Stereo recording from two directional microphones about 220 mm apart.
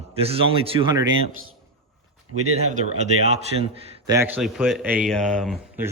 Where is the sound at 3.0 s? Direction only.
30° right (ahead or behind).